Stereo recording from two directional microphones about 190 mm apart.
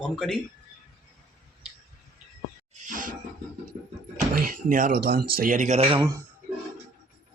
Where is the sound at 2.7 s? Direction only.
45° right (ahead or behind).